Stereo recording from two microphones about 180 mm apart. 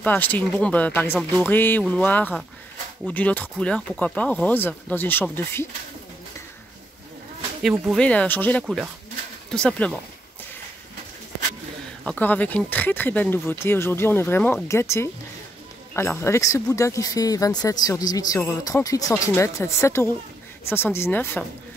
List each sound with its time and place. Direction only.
0.0 s speech: 10° left (ahead or behind)
7.9 s speech: 5° left (ahead or behind)
8.6 s speech: centre (ahead or behind)
12.0 s speech: 5° left (ahead or behind)